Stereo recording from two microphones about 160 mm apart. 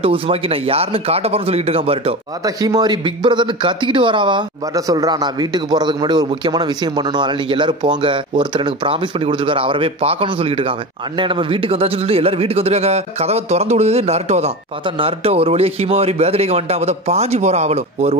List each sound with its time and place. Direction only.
0.0 s speech: 35° right (ahead or behind)
2.4 s speech: 25° right (ahead or behind); by 18.1 s 40° right (ahead or behind)